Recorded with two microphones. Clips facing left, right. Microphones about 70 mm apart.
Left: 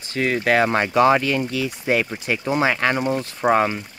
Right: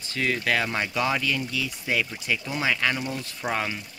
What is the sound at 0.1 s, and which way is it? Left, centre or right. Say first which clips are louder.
Speech: left 6 dB; left.